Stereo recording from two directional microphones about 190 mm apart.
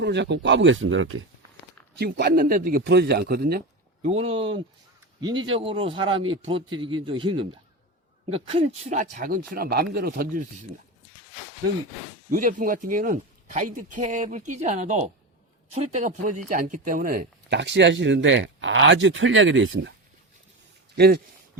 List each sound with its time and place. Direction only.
0.0 s speech: 65° right (ahead or behind); by 1.2 s 90° right
2.0 s a man's voice: 55° right (ahead or behind)
4.0 s a man's voice: 35° right (ahead or behind)
12.3 s speech: 45° right (ahead or behind); by 19.9 s 80° right
20.9 s a man's voice: 60° right (ahead or behind)